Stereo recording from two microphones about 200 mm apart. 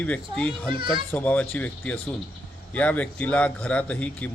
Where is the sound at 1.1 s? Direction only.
10° left (ahead or behind).